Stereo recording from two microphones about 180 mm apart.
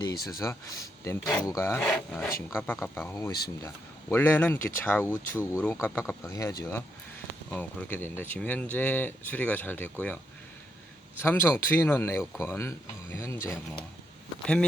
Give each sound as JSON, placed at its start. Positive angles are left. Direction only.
{"t": 0.3, "sound": "speech", "side_deg": 20}
{"t": 1.9, "sound": "speech", "side_deg": 0}
{"t": 5.0, "sound": "speech", "side_deg": -10}
{"t": 5.6, "sound": "speech", "side_deg": 10}
{"t": 11.2, "sound": "speech", "side_deg": 10}
{"t": 14.4, "sound": "speech", "side_deg": 5}